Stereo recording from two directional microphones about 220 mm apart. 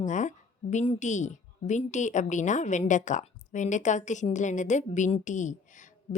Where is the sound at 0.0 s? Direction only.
35° left (ahead or behind).